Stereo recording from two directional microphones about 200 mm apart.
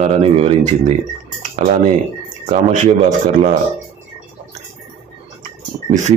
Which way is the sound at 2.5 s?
40° right (ahead or behind).